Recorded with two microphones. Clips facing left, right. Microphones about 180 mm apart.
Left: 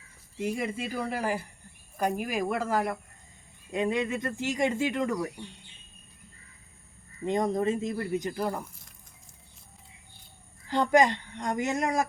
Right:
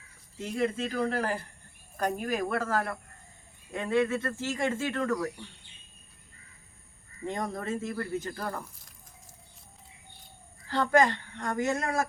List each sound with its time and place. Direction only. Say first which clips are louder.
0.3 s speech: right 1 dB; 10° left (ahead or behind)
7.3 s speech: left 6 dB; 20° left (ahead or behind)
10.7 s speech: left 2 dB; 15° left (ahead or behind)